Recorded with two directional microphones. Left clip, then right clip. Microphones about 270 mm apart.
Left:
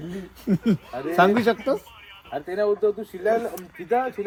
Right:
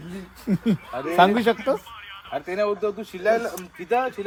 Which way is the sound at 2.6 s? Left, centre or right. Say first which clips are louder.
Left 3 dB; right.